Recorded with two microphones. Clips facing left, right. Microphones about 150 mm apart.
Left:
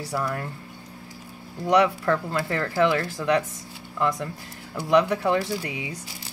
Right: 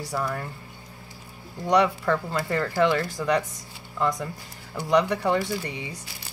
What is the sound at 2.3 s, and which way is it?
Speech, centre (ahead or behind).